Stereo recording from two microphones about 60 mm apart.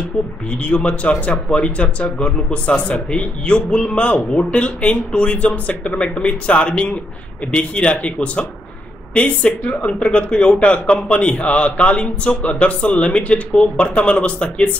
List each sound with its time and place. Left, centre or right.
0.7 s a man's voice: left